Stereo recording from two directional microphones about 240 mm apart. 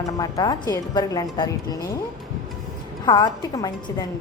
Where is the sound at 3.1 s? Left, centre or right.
Centre.